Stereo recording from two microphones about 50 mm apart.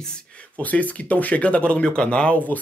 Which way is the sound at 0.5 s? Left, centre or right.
Left.